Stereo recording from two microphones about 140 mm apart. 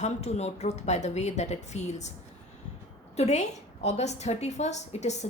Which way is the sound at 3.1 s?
50° left (ahead or behind).